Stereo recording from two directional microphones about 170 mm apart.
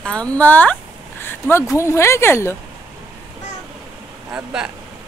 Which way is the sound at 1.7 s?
15° left (ahead or behind).